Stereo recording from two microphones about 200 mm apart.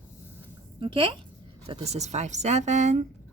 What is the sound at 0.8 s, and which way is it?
A woman's voice, 25° right (ahead or behind).